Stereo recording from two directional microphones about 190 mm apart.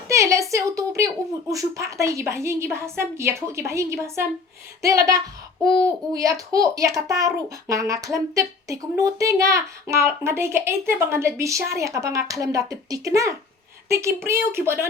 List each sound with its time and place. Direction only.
0.1 s a child's voice: 15° right (ahead or behind)